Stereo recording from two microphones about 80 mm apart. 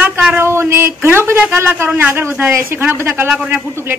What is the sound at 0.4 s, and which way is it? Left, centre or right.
A woman's voice, right.